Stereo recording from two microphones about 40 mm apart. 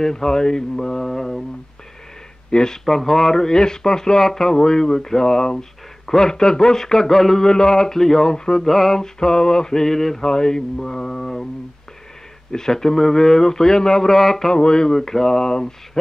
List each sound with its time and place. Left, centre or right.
0.0 s speech: centre
2.5 s speech: centre
2.8 s speech: centre
12.4 s speech: centre
14.5 s speech: centre